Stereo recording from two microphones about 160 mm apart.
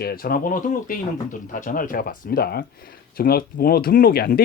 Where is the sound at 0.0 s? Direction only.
70° left (ahead or behind).